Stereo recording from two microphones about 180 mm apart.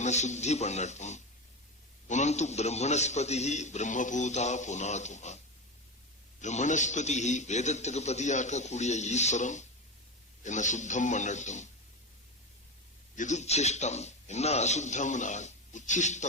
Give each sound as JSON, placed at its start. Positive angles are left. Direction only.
{"t": 0.0, "sound": "a man's voice", "side_deg": 40}
{"t": 6.4, "sound": "a man's voice", "side_deg": 40}
{"t": 13.1, "sound": "a man's voice", "side_deg": 40}